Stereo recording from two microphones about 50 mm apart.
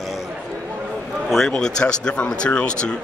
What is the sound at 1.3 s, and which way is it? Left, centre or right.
Speech, centre.